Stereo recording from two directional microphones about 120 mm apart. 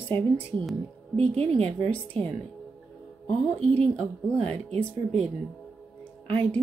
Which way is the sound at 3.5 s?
10° left (ahead or behind).